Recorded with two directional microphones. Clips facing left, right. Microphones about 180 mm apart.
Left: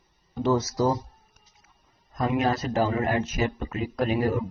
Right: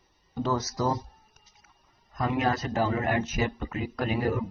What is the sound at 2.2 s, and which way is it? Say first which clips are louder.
A man's voice: left 2 dB; 30° left (ahead or behind).